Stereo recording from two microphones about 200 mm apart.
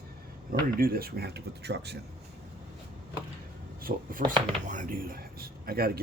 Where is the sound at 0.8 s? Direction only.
50° right (ahead or behind).